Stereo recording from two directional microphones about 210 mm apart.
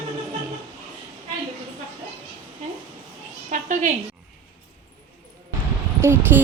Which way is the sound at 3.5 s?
40° right (ahead or behind).